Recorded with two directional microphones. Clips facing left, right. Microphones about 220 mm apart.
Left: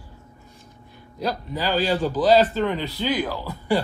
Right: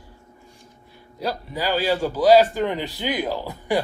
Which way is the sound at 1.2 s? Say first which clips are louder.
Even; 10° right (ahead or behind).